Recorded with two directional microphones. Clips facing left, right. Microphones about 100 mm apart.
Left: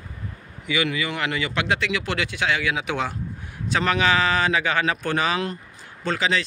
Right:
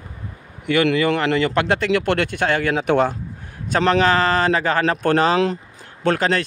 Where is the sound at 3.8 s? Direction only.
35° right (ahead or behind).